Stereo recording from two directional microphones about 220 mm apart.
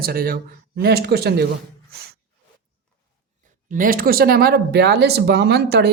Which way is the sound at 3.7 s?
40° right (ahead or behind).